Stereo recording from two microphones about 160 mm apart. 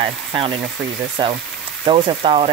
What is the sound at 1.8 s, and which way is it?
Frying, 35° right (ahead or behind).